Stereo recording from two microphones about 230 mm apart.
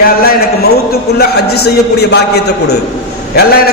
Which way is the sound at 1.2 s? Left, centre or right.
Left.